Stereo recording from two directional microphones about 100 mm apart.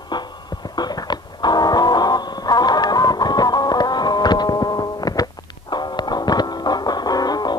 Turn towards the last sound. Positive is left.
turn(degrees=40)  # may be behind; listen again after turning